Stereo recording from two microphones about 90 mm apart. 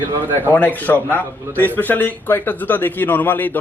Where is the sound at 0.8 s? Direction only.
20° left (ahead or behind).